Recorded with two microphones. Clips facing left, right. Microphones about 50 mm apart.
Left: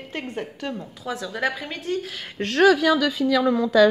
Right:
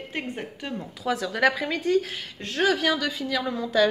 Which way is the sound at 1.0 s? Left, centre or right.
Right.